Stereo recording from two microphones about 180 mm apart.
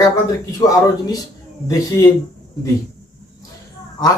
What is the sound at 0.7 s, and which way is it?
Speech, 20° left (ahead or behind).